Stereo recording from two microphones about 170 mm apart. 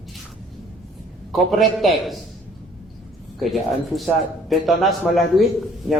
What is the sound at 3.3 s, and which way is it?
Speech, centre (ahead or behind).